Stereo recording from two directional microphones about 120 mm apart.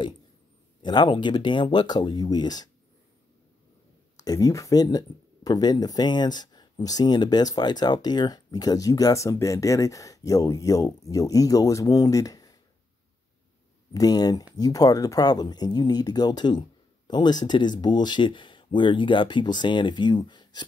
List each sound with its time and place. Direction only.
0.8 s speech: 40° left (ahead or behind)
4.2 s speech: 30° left (ahead or behind)
13.9 s speech: 30° left (ahead or behind)